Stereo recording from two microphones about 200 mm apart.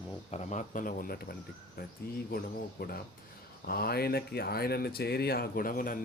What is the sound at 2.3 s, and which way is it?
Speech, 50° left (ahead or behind).